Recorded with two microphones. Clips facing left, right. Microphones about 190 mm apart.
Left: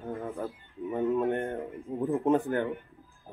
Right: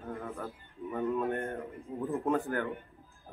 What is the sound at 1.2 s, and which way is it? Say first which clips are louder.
Speech: left 4 dB; 30° left (ahead or behind).